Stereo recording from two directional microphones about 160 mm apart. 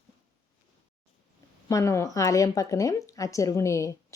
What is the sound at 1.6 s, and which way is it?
A woman's voice, 20° left (ahead or behind).